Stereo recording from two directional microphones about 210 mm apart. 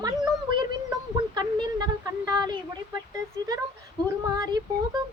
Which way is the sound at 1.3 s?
20° right (ahead or behind).